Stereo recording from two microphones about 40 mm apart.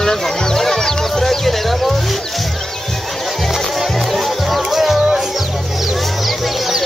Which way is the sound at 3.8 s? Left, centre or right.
Centre.